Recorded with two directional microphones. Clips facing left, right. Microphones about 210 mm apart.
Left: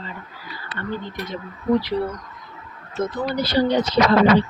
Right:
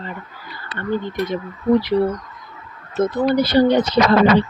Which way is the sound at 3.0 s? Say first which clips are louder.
Right 7 dB; 55° right (ahead or behind).